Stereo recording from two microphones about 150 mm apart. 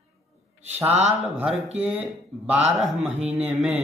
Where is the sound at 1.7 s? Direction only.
10° right (ahead or behind).